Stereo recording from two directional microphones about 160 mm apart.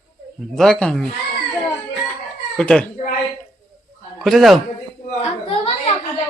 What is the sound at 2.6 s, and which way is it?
Speech, 5° left (ahead or behind).